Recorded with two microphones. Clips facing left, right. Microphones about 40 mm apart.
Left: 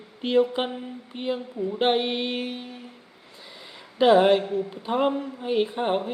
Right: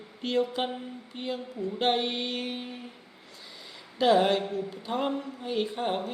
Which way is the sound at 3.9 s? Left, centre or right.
Left.